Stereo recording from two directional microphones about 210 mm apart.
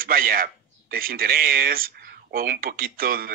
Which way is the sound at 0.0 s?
45° right (ahead or behind).